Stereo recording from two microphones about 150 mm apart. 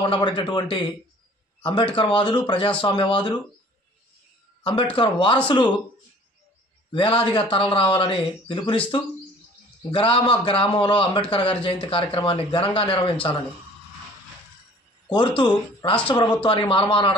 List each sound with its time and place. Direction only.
0.0 s a man's voice: 30° left (ahead or behind)
4.9 s a man's voice: 35° left (ahead or behind)
6.9 s a man's voice: 35° left (ahead or behind)
15.0 s a man's voice: 35° left (ahead or behind)